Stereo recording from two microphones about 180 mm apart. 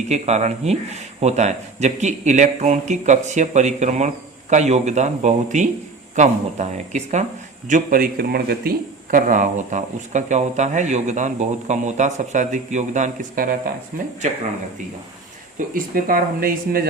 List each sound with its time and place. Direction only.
0.1 s speech: 40° right (ahead or behind)
7.7 s speech: 50° right (ahead or behind)
15.5 s speech: 50° right (ahead or behind)